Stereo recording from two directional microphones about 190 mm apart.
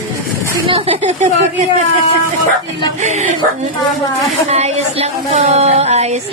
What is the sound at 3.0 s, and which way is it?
A woman's voice, 40° right (ahead or behind).